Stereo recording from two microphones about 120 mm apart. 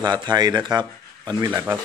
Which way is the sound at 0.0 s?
35° right (ahead or behind).